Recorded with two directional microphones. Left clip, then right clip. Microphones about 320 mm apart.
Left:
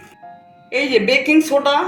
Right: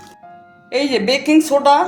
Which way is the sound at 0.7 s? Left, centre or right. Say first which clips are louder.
Left 1 dB; right.